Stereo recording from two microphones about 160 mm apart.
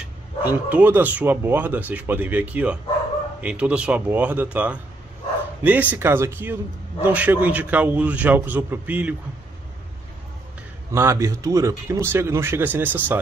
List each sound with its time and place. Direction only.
0.5 s speech: 10° right (ahead or behind)
10.9 s speech: 15° right (ahead or behind)